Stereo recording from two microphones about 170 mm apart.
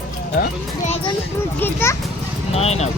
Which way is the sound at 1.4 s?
10° left (ahead or behind).